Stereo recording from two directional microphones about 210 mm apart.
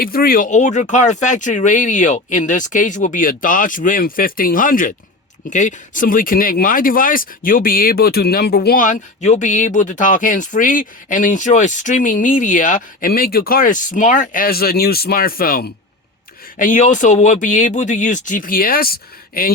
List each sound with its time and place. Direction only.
0.0 s speech: 45° left (ahead or behind)